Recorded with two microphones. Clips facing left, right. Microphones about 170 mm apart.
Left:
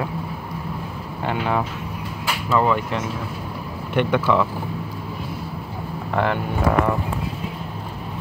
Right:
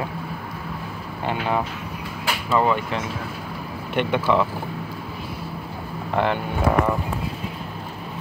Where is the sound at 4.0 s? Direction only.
20° right (ahead or behind).